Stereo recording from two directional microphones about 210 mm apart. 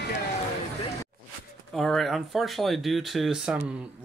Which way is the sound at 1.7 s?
Centre (ahead or behind).